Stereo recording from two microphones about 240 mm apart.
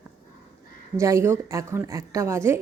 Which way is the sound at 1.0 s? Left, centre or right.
Centre.